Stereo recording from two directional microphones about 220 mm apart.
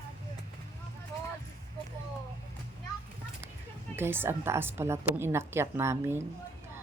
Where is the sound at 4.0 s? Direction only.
10° right (ahead or behind).